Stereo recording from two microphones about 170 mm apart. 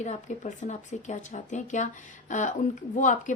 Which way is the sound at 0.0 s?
45° left (ahead or behind).